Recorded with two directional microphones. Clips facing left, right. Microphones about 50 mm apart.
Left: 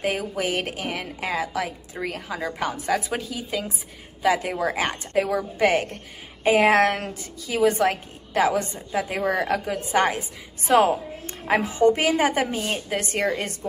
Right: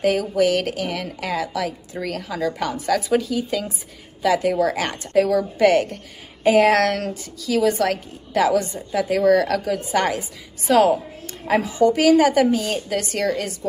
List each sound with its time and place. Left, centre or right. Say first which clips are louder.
0.0 s a woman's voice: right 7 dB; centre
11.6 s a woman's voice: right 3 dB; left